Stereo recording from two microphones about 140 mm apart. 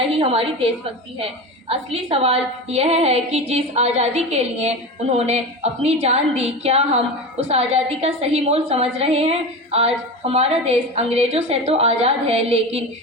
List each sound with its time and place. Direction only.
0.1 s a woman's voice: 45° right (ahead or behind)
1.7 s a woman's voice: 45° right (ahead or behind)